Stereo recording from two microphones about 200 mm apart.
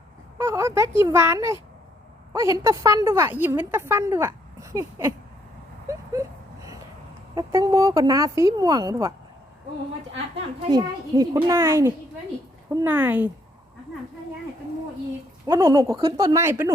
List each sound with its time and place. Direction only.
0.3 s a woman's voice: 15° right (ahead or behind)
5.9 s a sound: 15° right (ahead or behind)
7.3 s speech: 20° right (ahead or behind)
10.7 s a child's voice: 20° right (ahead or behind)
15.4 s speech: 20° right (ahead or behind)